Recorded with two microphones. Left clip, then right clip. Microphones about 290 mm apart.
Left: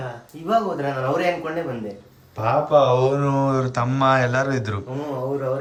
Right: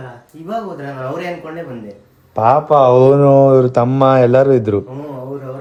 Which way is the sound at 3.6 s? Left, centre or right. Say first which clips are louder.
Right 8 dB; centre.